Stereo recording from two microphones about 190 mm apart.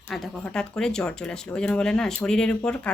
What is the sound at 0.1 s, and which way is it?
A woman's voice, centre (ahead or behind).